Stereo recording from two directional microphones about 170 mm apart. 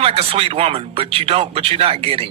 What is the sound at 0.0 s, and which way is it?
Speech, 35° right (ahead or behind).